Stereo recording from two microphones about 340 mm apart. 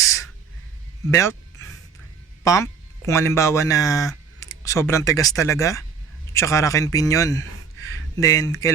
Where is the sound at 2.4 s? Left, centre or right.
Centre.